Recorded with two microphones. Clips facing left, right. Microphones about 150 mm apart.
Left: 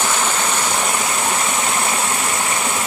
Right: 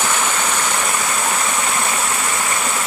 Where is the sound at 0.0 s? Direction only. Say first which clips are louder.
Even; 10° left (ahead or behind).